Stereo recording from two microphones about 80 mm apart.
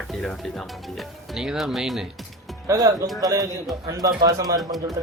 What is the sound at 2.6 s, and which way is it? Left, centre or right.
Speech, right.